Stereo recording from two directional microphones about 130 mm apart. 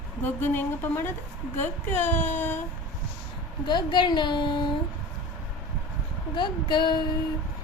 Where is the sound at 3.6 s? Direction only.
35° left (ahead or behind).